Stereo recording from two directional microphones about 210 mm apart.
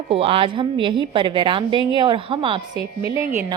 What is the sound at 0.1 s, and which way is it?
A woman's voice, 25° right (ahead or behind).